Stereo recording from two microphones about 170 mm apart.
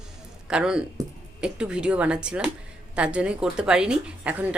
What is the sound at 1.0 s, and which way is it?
Speech, 20° right (ahead or behind).